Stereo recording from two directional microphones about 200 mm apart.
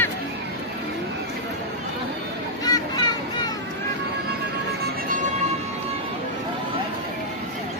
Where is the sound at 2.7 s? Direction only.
20° left (ahead or behind).